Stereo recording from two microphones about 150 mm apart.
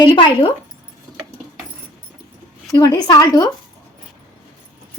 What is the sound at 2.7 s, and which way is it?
Speech, 25° left (ahead or behind).